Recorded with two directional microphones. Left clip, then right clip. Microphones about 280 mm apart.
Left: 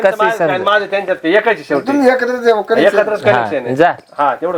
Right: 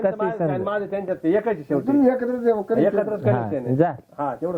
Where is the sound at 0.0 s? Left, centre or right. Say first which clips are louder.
Left 10 dB; centre.